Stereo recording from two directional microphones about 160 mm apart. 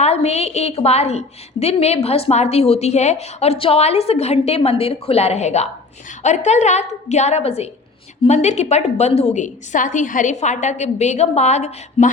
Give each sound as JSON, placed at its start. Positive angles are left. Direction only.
{"t": 0.0, "sound": "a woman's voice", "side_deg": 40}